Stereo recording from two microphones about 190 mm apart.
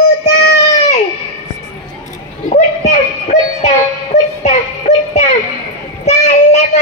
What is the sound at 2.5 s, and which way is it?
Music, 40° left (ahead or behind).